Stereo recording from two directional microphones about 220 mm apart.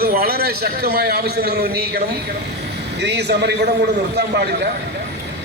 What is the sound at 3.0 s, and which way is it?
Speech, 50° right (ahead or behind).